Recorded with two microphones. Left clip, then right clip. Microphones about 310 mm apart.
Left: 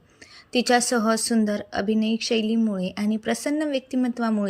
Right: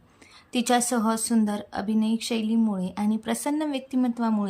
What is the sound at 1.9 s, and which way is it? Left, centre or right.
Speech, right.